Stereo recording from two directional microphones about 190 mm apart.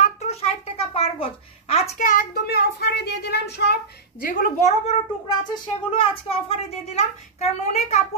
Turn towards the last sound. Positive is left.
turn(degrees=35)  # may be behind; listen again after turning